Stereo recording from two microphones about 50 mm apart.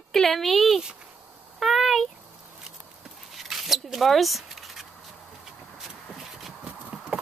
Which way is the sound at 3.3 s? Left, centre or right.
Centre.